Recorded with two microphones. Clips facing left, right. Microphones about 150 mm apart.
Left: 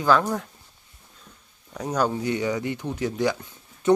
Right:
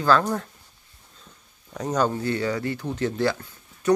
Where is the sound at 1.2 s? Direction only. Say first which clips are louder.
Right 1 dB; 5° left (ahead or behind).